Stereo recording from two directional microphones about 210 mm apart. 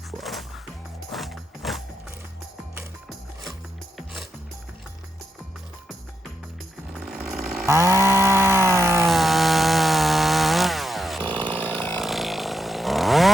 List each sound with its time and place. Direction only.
0.2 s music: centre (ahead or behind)
3.9 s music: centre (ahead or behind)
7.0 s chainsaw: 5° right (ahead or behind)
7.7 s chainsaw: 15° right (ahead or behind)
9.0 s chainsaw: centre (ahead or behind)
11.3 s chainsaw: 20° right (ahead or behind)
11.7 s chainsaw: 5° left (ahead or behind)